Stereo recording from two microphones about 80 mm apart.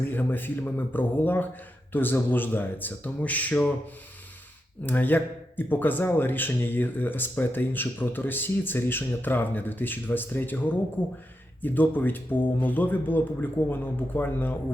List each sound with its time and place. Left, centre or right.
0.0 s speech: left
4.9 s speech: left